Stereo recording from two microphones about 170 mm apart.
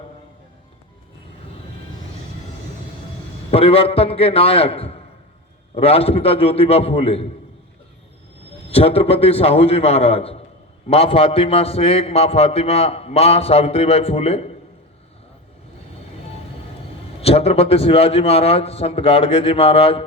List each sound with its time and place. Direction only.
3.5 s a man's voice: 35° left (ahead or behind)
8.7 s a man's voice: 35° left (ahead or behind)
17.2 s a man's voice: 35° left (ahead or behind)